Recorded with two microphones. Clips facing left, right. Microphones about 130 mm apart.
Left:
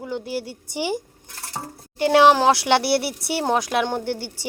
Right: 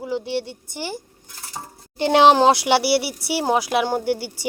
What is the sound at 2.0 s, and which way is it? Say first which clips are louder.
Speech: right 1 dB; 25° right (ahead or behind).